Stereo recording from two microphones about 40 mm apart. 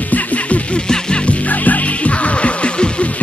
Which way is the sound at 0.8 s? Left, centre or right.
Left.